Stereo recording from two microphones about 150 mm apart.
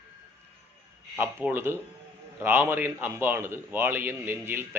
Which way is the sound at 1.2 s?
15° right (ahead or behind).